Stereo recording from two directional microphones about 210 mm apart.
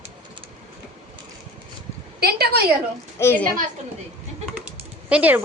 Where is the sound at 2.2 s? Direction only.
50° right (ahead or behind).